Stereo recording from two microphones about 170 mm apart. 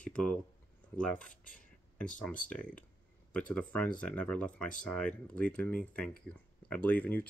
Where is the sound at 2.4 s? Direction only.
10° left (ahead or behind).